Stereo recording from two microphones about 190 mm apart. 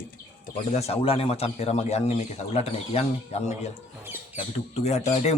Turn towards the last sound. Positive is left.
turn(degrees=35)  # may be behind; listen again after turning